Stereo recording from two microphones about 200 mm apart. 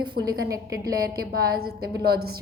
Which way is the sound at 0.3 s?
15° right (ahead or behind).